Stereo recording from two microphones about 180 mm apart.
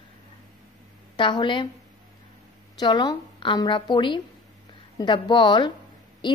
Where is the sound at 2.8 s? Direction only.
25° left (ahead or behind).